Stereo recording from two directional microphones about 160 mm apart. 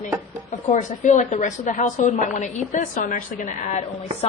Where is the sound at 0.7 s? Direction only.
50° left (ahead or behind).